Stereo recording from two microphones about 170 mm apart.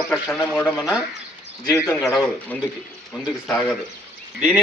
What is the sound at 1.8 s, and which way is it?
A man's voice, centre (ahead or behind).